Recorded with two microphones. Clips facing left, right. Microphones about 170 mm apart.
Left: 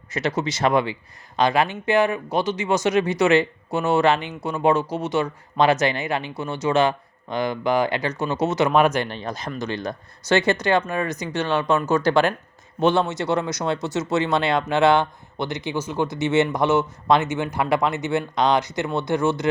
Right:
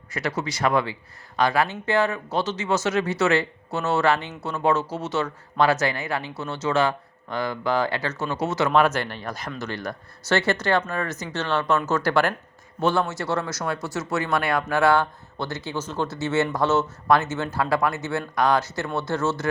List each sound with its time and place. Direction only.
0.1 s speech: 20° left (ahead or behind)